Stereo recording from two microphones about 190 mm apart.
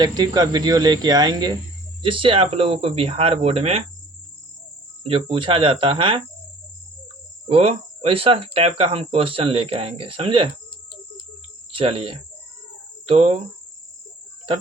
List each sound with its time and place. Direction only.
0.0 s speech: 20° right (ahead or behind)
5.0 s speech: 30° right (ahead or behind)
7.4 s speech: 30° right (ahead or behind)
11.7 s speech: 30° right (ahead or behind)
13.1 s cricket: 35° right (ahead or behind)